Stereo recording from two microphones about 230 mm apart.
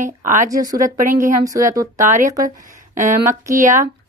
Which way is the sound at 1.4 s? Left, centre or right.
Centre.